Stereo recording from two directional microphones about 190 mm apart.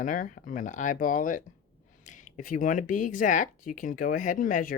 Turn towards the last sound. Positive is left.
turn(degrees=45)  # may be behind; listen again after turning